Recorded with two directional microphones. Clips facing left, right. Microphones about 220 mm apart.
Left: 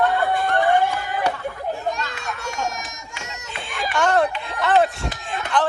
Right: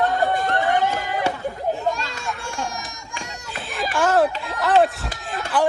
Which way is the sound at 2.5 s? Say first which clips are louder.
Left 2 dB; 20° left (ahead or behind).